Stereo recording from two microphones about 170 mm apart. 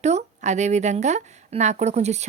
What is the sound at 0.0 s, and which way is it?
A woman's voice, 40° right (ahead or behind).